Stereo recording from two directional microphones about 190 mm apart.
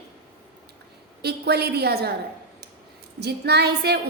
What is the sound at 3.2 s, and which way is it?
Speech, 60° right (ahead or behind).